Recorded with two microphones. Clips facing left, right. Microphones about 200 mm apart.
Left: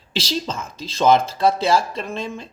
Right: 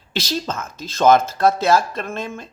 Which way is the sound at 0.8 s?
50° right (ahead or behind).